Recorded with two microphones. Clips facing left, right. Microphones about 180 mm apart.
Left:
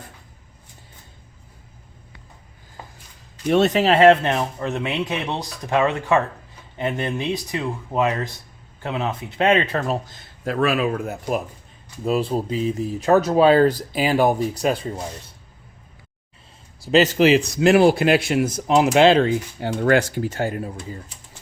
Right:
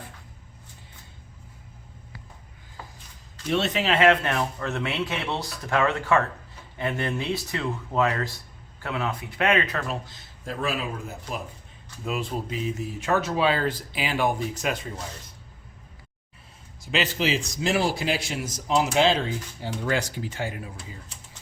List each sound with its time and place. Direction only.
3.5 s speech: 45° left (ahead or behind); by 9.8 s 30° left (ahead or behind)
9.8 s speech: 45° left (ahead or behind)
10.4 s speech: 70° left (ahead or behind)
12.0 s speech: 35° left (ahead or behind)
16.8 s a man's voice: 40° left (ahead or behind)
17.2 s speech: 60° left (ahead or behind); by 21.0 s 45° left (ahead or behind)